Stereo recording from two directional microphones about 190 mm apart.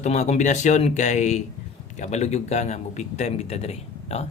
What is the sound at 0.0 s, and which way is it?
A man's voice, 35° left (ahead or behind).